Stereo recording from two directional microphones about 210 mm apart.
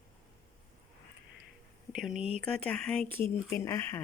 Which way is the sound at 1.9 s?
Centre (ahead or behind).